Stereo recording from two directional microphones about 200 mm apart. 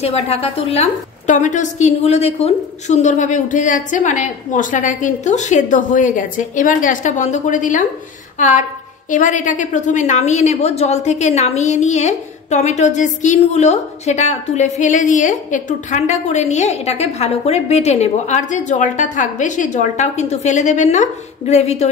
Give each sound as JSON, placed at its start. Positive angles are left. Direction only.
{"t": 0.0, "sound": "a woman's voice", "side_deg": 30}